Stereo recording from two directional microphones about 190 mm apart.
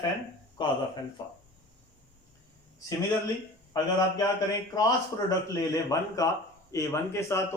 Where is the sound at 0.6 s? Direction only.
25° left (ahead or behind).